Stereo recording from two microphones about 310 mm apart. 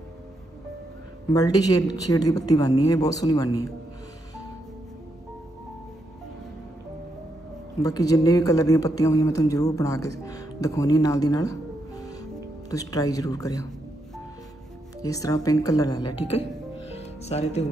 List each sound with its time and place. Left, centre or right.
1.3 s speech: centre
7.8 s speech: centre
15.0 s speech: centre
16.9 s music: left